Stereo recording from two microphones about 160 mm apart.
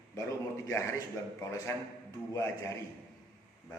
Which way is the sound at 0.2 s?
20° left (ahead or behind).